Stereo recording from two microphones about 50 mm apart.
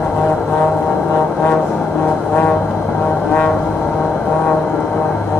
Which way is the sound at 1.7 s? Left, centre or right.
Centre.